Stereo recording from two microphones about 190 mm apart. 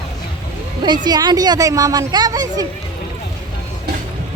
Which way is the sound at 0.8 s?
25° right (ahead or behind).